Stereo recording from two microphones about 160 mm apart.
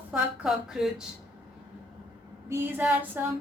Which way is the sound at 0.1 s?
5° right (ahead or behind).